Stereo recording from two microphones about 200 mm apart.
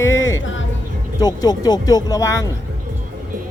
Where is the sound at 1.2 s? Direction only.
20° left (ahead or behind).